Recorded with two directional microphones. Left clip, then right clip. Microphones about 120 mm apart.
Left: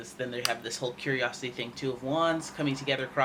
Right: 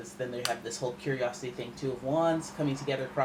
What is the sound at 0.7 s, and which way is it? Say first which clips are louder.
Speech: left 2 dB; 40° left (ahead or behind).